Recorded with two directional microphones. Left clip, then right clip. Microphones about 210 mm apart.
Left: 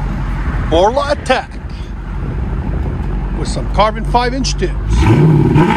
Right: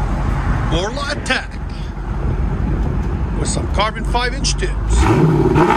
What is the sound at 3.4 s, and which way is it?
Speech, 5° right (ahead or behind).